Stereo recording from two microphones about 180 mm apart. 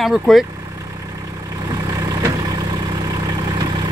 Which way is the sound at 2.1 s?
20° right (ahead or behind).